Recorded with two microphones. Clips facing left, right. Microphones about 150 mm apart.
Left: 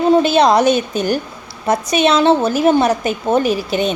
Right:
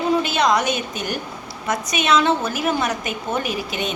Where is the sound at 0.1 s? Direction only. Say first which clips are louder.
Left 7 dB; 30° left (ahead or behind).